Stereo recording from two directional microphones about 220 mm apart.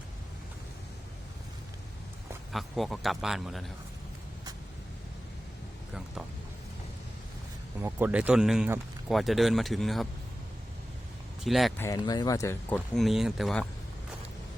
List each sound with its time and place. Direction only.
2.5 s speech: centre (ahead or behind)
7.8 s speech: 10° right (ahead or behind)
11.4 s speech: centre (ahead or behind)
11.8 s speech: 15° left (ahead or behind)
13.0 s speech: centre (ahead or behind)